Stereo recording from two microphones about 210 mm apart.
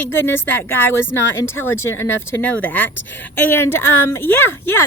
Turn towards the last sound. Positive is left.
turn(degrees=10)  # may be behind; listen again after turning